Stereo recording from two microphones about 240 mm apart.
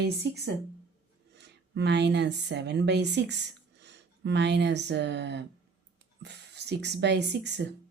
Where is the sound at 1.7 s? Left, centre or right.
Right.